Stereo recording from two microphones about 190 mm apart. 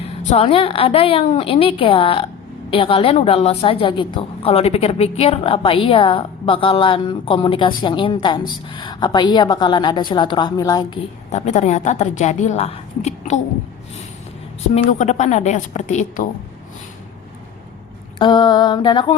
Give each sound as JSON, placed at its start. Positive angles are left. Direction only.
{"t": 0.0, "sound": "a woman's voice", "side_deg": 30}
{"t": 11.3, "sound": "a woman's voice", "side_deg": 35}
{"t": 14.8, "sound": "a woman's voice", "side_deg": 40}
{"t": 18.2, "sound": "a woman's voice", "side_deg": 25}